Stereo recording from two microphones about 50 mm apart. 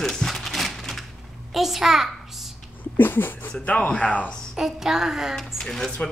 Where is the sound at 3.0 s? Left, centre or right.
Left.